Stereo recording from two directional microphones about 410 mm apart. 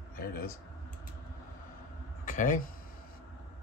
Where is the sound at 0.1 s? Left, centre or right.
Left.